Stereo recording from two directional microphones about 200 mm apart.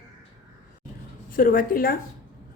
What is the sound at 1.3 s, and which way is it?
Speech, 45° left (ahead or behind).